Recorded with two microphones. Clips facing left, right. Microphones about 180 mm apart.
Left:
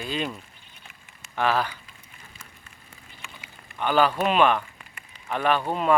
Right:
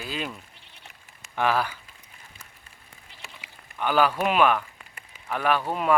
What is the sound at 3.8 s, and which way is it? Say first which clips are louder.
Speech: left 1 dB; 10° right (ahead or behind).